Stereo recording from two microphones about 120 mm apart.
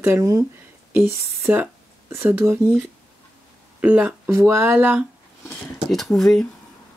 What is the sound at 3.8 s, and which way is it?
Speech, 10° right (ahead or behind).